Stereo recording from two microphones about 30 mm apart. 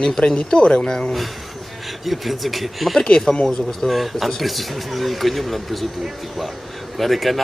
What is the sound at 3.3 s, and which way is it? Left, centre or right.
Speech, left.